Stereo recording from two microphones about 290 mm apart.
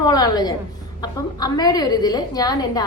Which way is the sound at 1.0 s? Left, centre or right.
Centre.